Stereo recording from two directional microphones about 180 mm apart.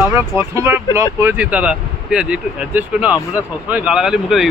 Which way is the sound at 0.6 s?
15° right (ahead or behind).